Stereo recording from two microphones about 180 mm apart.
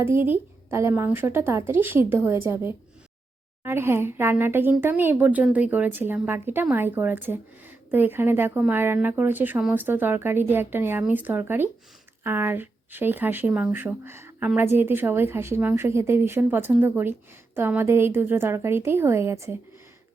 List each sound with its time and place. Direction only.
0.0 s speech: 15° right (ahead or behind)